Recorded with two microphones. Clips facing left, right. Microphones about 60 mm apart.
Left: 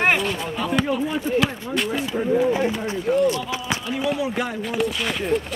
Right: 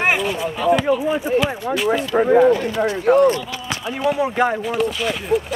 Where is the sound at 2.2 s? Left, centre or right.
Right.